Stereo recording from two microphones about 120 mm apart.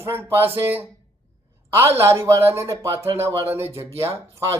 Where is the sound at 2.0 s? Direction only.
25° right (ahead or behind).